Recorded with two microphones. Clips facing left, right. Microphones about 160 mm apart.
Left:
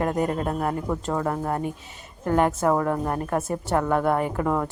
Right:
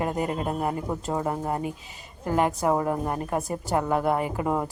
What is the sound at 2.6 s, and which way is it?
A woman's voice, 15° right (ahead or behind).